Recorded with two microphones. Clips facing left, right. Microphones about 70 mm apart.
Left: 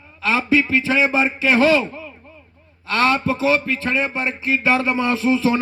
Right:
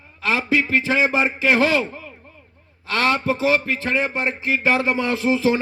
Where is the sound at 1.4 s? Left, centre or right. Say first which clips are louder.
Left 3 dB; right.